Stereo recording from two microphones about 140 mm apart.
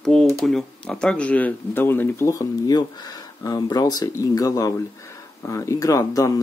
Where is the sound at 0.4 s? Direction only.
5° left (ahead or behind).